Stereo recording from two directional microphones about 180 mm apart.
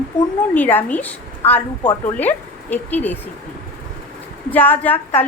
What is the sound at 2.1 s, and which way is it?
A woman's voice, 10° left (ahead or behind).